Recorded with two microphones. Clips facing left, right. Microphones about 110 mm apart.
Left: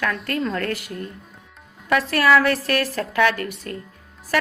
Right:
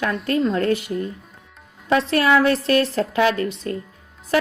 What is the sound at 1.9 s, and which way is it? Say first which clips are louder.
A woman's voice: even; 25° right (ahead or behind).